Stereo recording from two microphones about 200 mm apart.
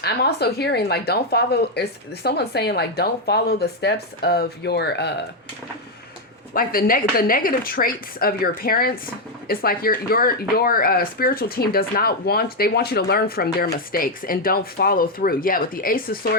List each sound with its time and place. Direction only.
0.0 s speech: 55° left (ahead or behind)
6.5 s speech: 45° left (ahead or behind)